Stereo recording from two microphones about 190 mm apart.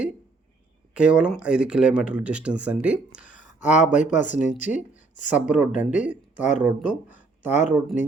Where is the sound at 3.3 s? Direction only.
40° left (ahead or behind).